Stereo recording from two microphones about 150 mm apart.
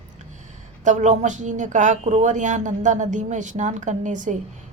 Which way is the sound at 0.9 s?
55° right (ahead or behind).